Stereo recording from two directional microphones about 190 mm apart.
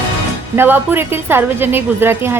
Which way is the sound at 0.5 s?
10° right (ahead or behind).